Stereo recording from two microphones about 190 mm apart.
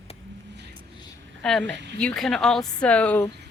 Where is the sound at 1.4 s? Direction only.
5° left (ahead or behind).